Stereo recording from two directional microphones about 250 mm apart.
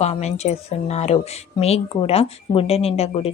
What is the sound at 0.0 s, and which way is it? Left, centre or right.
Speech, left.